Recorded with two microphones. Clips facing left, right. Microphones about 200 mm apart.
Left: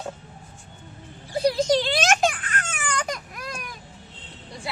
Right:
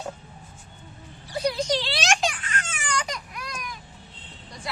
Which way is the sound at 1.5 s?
45° left (ahead or behind).